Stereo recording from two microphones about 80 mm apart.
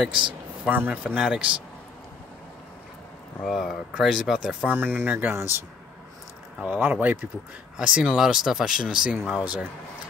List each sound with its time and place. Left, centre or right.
0.1 s speech: right
0.7 s speech: right
1.1 s speech: centre
3.4 s speech: centre
4.6 s speech: right
6.6 s speech: centre